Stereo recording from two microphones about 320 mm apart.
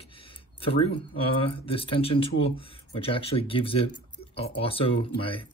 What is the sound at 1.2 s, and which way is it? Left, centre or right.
Speech, centre.